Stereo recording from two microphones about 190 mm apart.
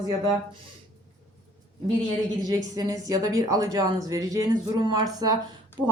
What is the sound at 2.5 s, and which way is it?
A woman's voice, 20° right (ahead or behind).